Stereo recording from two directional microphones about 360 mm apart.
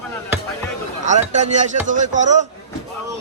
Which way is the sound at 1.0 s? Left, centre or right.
Centre.